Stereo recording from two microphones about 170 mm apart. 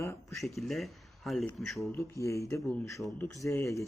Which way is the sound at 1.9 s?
15° left (ahead or behind).